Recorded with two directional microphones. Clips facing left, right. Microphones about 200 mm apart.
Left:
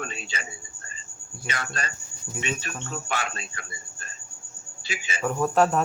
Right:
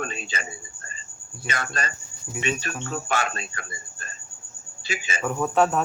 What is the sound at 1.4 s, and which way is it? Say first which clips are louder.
Speech: right 3 dB; 45° right (ahead or behind).